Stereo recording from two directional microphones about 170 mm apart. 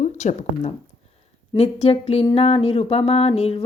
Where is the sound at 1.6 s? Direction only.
35° left (ahead or behind).